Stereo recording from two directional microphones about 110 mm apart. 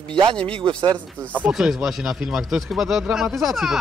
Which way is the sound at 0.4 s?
10° left (ahead or behind).